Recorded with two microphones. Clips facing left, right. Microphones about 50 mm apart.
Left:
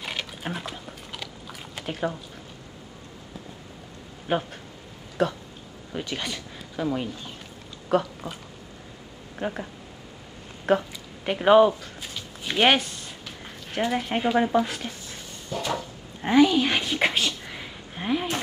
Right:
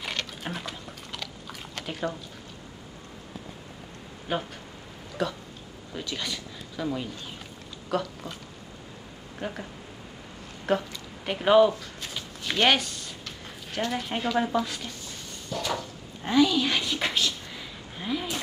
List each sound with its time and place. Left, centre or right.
0.0 s biting: centre
4.3 s speech: left
5.9 s speech: left
9.4 s speech: centre
10.7 s speech: centre
12.1 s a sound: centre
12.6 s speech: centre
15.5 s a sound: centre
16.2 s a sound: left